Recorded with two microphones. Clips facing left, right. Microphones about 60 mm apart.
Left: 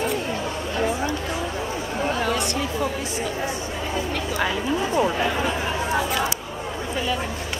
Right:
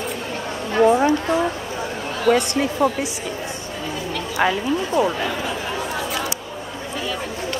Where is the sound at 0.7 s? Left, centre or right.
Right.